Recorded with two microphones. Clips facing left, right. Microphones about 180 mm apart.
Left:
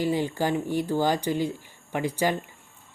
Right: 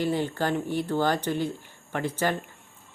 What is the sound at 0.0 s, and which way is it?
Speech, 10° left (ahead or behind).